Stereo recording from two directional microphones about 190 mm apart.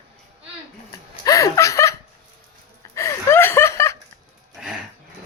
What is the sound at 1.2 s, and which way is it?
Laughter, 20° left (ahead or behind).